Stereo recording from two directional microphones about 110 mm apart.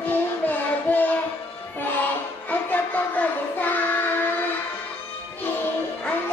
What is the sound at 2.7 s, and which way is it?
Child singing, 15° left (ahead or behind).